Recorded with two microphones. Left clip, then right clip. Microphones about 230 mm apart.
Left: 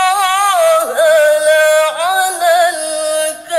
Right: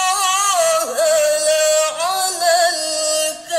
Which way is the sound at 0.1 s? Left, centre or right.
Centre.